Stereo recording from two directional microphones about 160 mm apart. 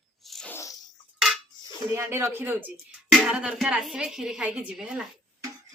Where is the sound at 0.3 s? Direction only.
5° left (ahead or behind).